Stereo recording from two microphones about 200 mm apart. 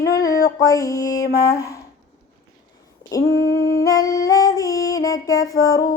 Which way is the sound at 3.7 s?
15° left (ahead or behind).